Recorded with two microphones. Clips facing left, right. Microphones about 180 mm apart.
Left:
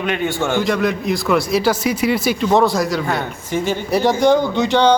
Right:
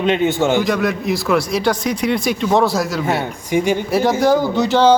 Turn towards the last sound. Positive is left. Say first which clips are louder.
# right 1 dB
turn(degrees=-5)  # may be behind; listen again after turning